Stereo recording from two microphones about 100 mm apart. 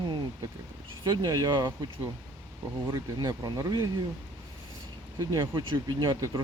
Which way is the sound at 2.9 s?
35° right (ahead or behind).